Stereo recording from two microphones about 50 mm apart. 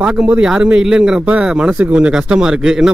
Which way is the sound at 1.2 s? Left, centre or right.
Right.